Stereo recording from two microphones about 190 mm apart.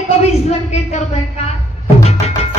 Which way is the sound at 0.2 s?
35° left (ahead or behind).